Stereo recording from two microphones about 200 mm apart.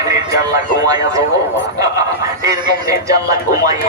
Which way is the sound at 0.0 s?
15° right (ahead or behind).